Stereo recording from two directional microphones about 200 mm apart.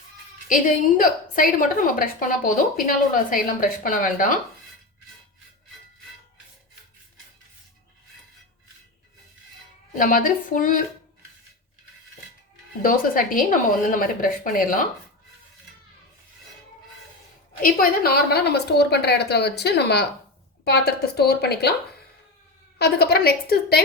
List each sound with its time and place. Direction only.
0.4 s a woman's voice: 40° left (ahead or behind)
10.0 s a woman's voice: 40° left (ahead or behind)
12.8 s a woman's voice: 45° left (ahead or behind)
17.6 s a woman's voice: 45° left (ahead or behind)
22.8 s a woman's voice: 55° left (ahead or behind)